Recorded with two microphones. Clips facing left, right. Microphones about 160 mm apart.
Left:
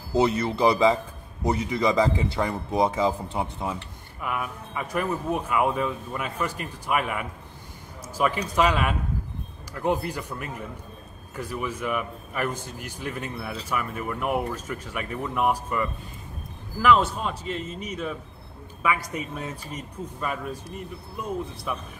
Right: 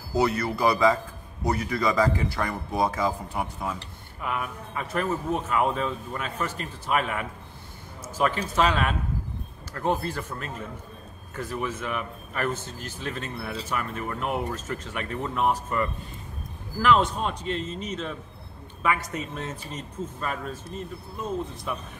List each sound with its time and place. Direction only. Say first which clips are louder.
0.1 s a man's voice: left 2 dB; 20° left (ahead or behind)
4.4 s a man's voice: left 1 dB; 10° left (ahead or behind)